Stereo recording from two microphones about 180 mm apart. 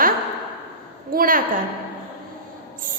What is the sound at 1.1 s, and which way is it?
Speech, 50° right (ahead or behind).